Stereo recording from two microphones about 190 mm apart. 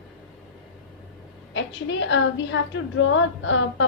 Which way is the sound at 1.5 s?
75° left (ahead or behind).